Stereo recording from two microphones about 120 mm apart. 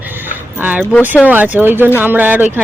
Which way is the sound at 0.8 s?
15° left (ahead or behind).